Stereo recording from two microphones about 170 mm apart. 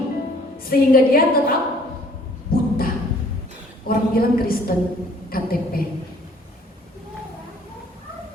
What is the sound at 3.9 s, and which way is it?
A woman's voice, 60° left (ahead or behind).